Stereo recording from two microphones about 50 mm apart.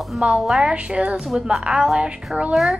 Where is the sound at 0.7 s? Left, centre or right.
Right.